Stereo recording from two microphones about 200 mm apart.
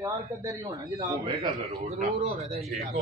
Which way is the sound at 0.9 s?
25° right (ahead or behind).